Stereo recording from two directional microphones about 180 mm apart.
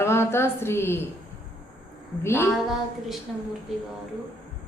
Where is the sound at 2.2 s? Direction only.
15° left (ahead or behind).